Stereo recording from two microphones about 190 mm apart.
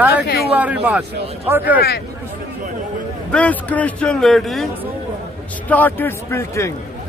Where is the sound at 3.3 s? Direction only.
5° left (ahead or behind).